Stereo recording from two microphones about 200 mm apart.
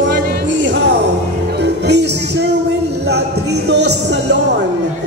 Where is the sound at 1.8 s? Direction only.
60° right (ahead or behind).